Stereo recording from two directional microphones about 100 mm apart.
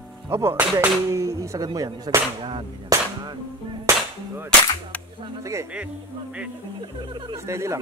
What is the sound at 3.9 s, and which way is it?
Cap gun, 25° right (ahead or behind).